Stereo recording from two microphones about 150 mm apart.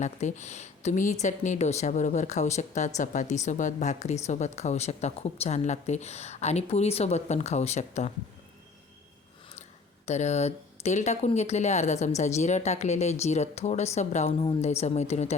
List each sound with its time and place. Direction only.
0.0 s a woman's voice: 50° left (ahead or behind)
10.1 s a woman's voice: 50° left (ahead or behind)